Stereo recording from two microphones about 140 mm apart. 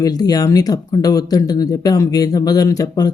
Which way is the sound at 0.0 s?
30° left (ahead or behind).